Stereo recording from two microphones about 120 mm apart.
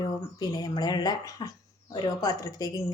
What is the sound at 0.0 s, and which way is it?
A woman's voice, 35° left (ahead or behind).